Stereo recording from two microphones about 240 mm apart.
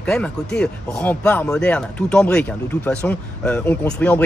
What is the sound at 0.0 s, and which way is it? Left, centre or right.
Speech, centre.